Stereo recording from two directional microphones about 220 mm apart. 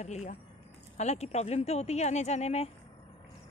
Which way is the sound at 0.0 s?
30° left (ahead or behind).